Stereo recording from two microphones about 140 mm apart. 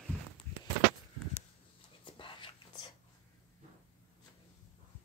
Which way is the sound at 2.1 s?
35° left (ahead or behind).